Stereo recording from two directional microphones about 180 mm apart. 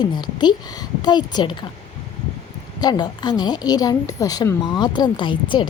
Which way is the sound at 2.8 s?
25° left (ahead or behind).